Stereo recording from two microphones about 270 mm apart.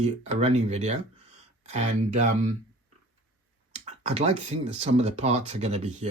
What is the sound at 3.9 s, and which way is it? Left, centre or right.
Speech, right.